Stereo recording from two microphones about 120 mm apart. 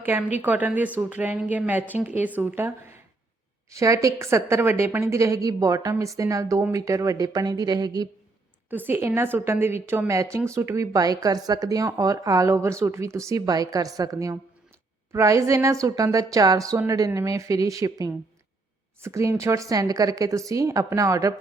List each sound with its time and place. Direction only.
0.0 s a woman's voice: 15° right (ahead or behind); by 8.0 s 35° right (ahead or behind)
8.7 s a woman's voice: 15° right (ahead or behind)